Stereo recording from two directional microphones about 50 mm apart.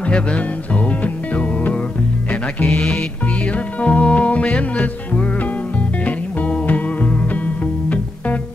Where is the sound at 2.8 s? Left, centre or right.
Centre.